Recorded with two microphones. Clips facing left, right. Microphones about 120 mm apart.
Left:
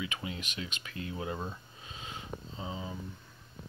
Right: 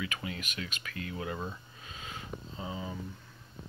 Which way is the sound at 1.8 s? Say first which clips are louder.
Even; 25° left (ahead or behind).